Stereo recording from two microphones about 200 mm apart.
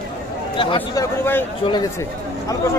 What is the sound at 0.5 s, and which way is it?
Speech, 25° left (ahead or behind).